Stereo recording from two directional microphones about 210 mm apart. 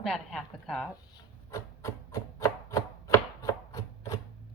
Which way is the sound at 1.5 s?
15° left (ahead or behind).